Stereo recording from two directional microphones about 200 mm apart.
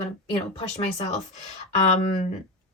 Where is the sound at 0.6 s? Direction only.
30° left (ahead or behind).